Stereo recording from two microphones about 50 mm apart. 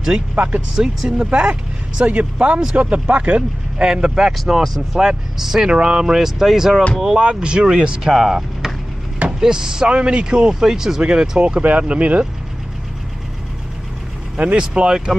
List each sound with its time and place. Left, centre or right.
0.6 s speech: centre
7.0 s speech: centre
14.3 s speech: right